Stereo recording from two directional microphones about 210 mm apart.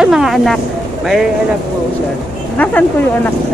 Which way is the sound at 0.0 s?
Centre (ahead or behind).